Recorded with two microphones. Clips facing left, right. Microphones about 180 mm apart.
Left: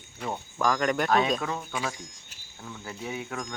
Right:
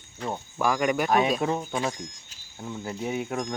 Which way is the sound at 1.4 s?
30° right (ahead or behind).